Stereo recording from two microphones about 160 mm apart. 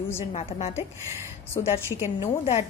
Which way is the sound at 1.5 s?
15° left (ahead or behind).